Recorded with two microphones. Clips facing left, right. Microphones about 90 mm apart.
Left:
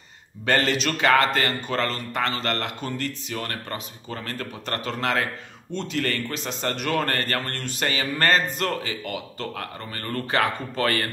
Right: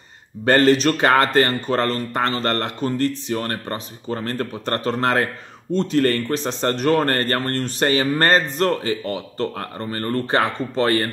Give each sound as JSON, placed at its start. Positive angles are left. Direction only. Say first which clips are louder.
{"t": 0.5, "sound": "a man's voice", "louder": "right 8 dB", "side_deg": -35}